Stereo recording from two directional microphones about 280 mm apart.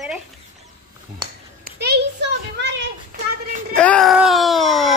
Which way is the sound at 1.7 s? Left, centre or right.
Right.